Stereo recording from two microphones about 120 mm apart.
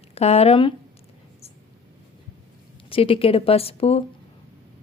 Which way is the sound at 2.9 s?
50° left (ahead or behind).